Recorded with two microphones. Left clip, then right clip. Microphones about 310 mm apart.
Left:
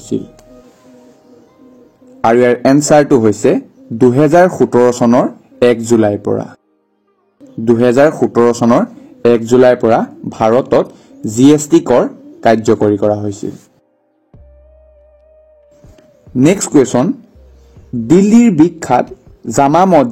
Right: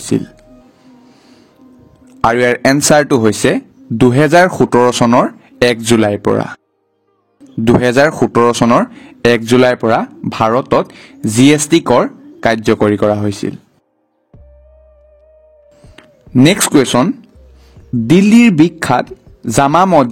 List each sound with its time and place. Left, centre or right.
2.2 s speech: right
7.6 s speech: right
16.4 s speech: right
18.1 s a man's voice: right